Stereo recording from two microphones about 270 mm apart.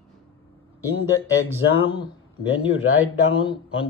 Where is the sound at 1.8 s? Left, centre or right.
Centre.